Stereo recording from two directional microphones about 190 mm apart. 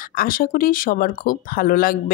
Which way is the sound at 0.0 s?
50° left (ahead or behind).